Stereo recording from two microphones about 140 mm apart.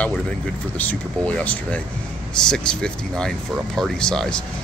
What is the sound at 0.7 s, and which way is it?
Speech, 10° left (ahead or behind).